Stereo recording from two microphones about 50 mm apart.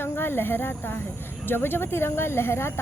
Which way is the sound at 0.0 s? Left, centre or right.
Left.